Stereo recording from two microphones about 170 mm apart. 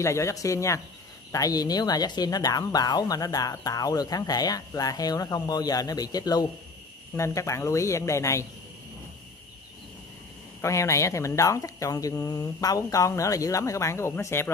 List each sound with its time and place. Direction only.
0.0 s speech: 15° left (ahead or behind)
10.6 s speech: 15° left (ahead or behind)